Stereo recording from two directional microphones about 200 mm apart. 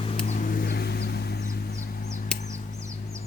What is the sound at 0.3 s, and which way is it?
Vehicle, 40° left (ahead or behind).